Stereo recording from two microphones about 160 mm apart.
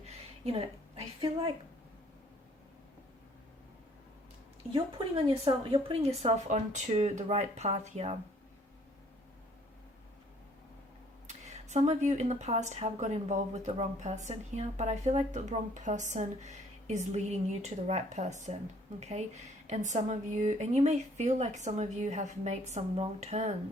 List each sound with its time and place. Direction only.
0.0 s a sound: 40° right (ahead or behind)
4.7 s speech: 35° right (ahead or behind)
11.3 s speech: 45° right (ahead or behind)